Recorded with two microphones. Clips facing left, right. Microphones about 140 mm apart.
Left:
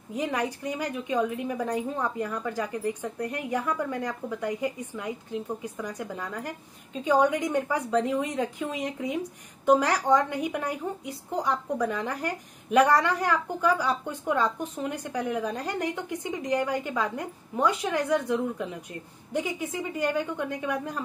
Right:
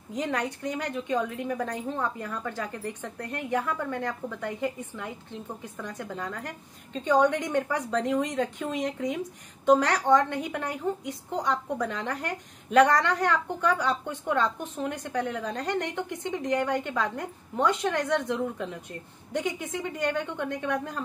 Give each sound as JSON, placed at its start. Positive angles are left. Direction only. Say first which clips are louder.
{"t": 0.1, "sound": "a woman's voice", "louder": "left 1 dB", "side_deg": 10}